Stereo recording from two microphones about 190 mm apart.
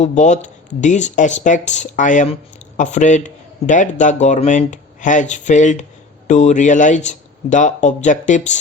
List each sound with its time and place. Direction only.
0.0 s a man's voice: 40° left (ahead or behind)